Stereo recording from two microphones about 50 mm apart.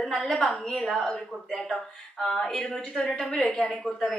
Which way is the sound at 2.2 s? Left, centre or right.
Centre.